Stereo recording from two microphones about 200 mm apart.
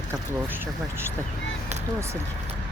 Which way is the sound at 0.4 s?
10° right (ahead or behind).